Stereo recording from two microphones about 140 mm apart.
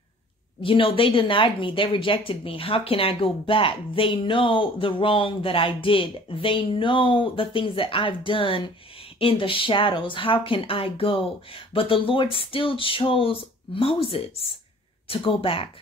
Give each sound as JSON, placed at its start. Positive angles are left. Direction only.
{"t": 0.6, "sound": "speech", "side_deg": 40}